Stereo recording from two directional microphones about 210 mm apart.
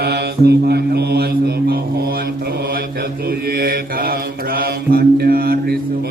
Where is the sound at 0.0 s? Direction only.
50° right (ahead or behind).